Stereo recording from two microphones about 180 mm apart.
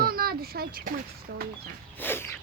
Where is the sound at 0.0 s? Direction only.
55° right (ahead or behind).